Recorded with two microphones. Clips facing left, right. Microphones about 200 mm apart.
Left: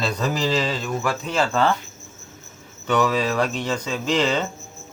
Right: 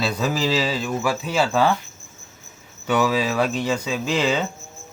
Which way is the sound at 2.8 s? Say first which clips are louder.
Even; 5° right (ahead or behind).